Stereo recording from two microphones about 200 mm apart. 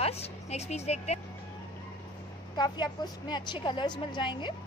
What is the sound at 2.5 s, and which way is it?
A woman's voice, 20° left (ahead or behind).